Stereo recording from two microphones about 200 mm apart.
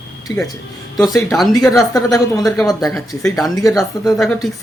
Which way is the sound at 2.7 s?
20° left (ahead or behind).